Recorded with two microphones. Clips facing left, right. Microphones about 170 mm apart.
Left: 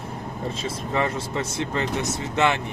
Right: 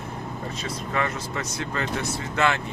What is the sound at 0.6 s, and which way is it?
Speech, 25° left (ahead or behind).